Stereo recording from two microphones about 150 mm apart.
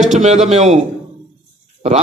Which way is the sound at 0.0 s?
50° right (ahead or behind).